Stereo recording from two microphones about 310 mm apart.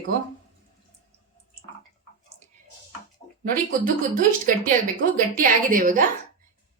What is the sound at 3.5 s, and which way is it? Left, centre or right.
A woman's voice, right.